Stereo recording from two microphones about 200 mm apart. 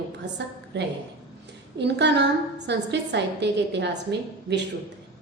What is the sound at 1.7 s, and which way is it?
A woman's voice, 60° right (ahead or behind).